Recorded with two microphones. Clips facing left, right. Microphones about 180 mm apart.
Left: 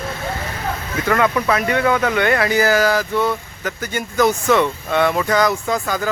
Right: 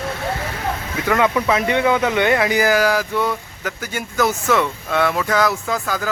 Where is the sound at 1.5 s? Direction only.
20° right (ahead or behind).